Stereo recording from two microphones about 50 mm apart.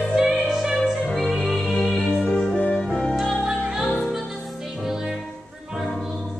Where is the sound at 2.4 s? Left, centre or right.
Left.